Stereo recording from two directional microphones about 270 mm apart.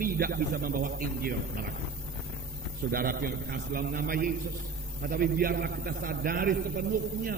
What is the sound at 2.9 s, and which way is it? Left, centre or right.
A man's voice, right.